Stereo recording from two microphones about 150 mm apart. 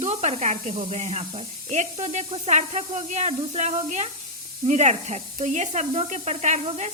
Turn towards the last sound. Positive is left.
turn(degrees=-50)  # may be behind; listen again after turning